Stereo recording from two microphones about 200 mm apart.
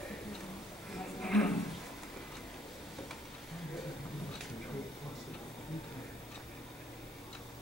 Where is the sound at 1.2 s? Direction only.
5° left (ahead or behind).